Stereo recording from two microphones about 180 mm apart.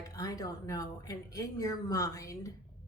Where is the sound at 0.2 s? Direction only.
20° left (ahead or behind).